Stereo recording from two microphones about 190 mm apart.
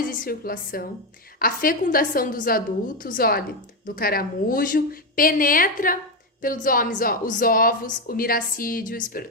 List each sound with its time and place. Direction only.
0.0 s a woman's voice: 45° left (ahead or behind)